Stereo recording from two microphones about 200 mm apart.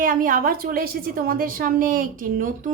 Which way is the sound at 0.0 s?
45° right (ahead or behind).